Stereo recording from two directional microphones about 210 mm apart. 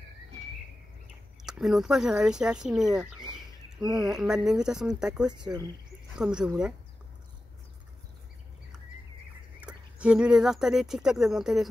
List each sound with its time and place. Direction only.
1.4 s speech: centre (ahead or behind)
5.4 s speech: 20° right (ahead or behind)
6.1 s speech: 5° right (ahead or behind)
9.6 s speech: 5° right (ahead or behind)